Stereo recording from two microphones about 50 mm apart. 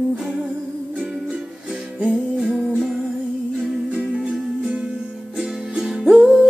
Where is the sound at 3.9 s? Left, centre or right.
Centre.